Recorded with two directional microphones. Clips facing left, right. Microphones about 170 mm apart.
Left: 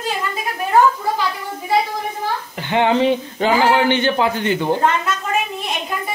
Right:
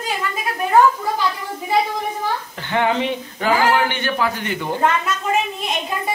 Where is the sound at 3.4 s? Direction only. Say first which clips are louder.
Left 2 dB; 25° left (ahead or behind).